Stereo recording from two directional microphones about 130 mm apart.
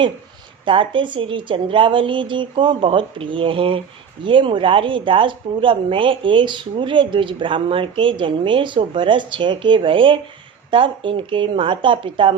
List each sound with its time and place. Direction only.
0.6 s a woman's voice: 40° right (ahead or behind)